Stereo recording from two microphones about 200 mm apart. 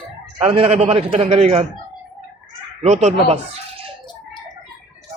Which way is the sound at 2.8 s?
35° right (ahead or behind).